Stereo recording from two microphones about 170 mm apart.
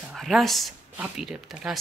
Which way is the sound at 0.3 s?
Centre (ahead or behind).